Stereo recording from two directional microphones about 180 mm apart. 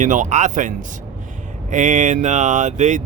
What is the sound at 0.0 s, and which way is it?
Speech, 45° right (ahead or behind).